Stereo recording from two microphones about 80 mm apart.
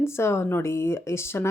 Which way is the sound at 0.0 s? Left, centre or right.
Left.